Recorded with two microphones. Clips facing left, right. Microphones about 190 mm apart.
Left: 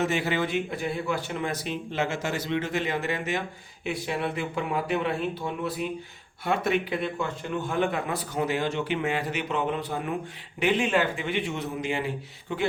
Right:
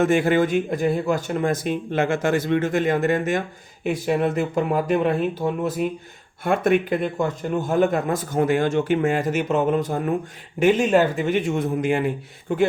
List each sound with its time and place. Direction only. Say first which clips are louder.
0.0 s speech: right 8 dB; 50° right (ahead or behind)